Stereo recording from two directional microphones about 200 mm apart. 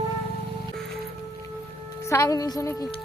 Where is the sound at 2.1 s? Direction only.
15° left (ahead or behind).